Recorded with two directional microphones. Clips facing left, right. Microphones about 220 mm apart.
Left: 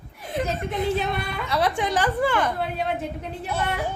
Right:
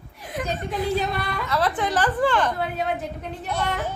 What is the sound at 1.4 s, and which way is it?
A woman's voice, 15° left (ahead or behind).